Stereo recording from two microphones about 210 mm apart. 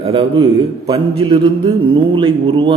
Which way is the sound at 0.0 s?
25° right (ahead or behind).